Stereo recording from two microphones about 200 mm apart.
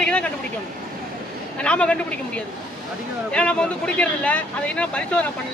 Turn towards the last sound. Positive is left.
turn(degrees=5)  # may be behind; listen again after turning